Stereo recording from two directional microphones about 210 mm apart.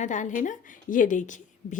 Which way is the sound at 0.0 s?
35° left (ahead or behind).